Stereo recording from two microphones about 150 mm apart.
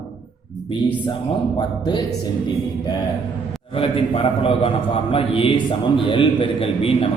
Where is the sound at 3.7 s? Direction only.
35° left (ahead or behind).